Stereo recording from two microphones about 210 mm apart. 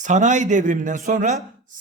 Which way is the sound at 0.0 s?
35° right (ahead or behind).